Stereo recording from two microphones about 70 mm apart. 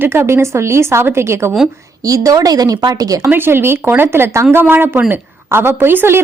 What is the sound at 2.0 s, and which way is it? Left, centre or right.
A woman's voice, right.